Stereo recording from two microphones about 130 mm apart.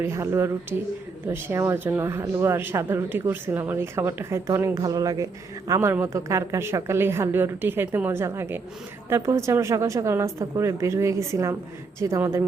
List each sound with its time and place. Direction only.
0.0 s speech: 20° right (ahead or behind)